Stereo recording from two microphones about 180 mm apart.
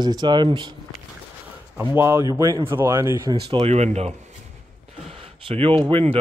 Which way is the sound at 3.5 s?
35° right (ahead or behind).